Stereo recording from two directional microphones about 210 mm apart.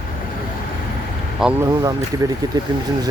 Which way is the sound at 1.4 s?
5° right (ahead or behind).